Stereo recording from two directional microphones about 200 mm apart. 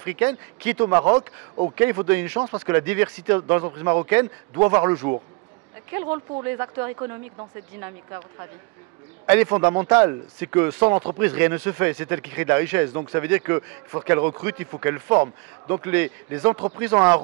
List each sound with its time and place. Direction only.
0.0 s speech: 10° right (ahead or behind); by 6.4 s 25° right (ahead or behind)
6.4 s a man's voice: 15° right (ahead or behind)